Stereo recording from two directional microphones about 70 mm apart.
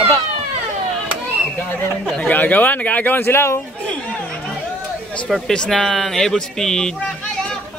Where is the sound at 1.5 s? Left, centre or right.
Left.